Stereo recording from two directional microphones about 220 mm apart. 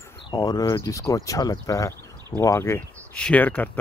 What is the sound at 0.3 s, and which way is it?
Speech, 15° left (ahead or behind).